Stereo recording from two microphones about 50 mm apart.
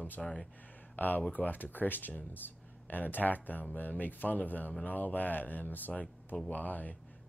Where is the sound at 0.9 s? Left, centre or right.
Left.